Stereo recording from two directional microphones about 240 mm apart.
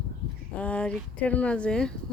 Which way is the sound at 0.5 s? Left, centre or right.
Centre.